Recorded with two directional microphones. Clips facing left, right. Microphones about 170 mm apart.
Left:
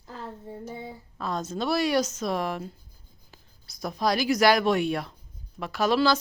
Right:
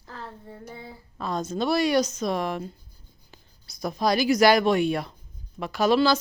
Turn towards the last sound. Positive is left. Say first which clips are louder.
# right 2 dB
turn(degrees=0)  # may be behind; listen again after turning